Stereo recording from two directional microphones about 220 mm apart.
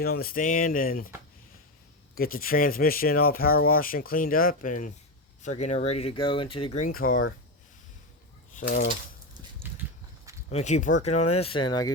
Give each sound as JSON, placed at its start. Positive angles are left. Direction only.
{"t": 0.0, "sound": "speech", "side_deg": 45}
{"t": 2.1, "sound": "speech", "side_deg": 40}
{"t": 8.5, "sound": "speech", "side_deg": 40}
{"t": 9.6, "sound": "a sound", "side_deg": -10}
{"t": 10.5, "sound": "speech", "side_deg": 30}